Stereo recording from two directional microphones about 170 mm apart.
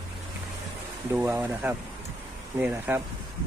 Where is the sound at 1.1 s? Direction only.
10° right (ahead or behind).